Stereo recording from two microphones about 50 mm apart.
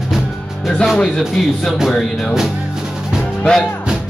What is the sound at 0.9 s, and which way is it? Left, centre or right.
Speech, centre.